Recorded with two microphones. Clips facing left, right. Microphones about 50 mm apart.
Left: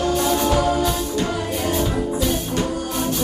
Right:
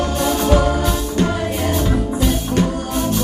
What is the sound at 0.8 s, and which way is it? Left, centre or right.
Music, right.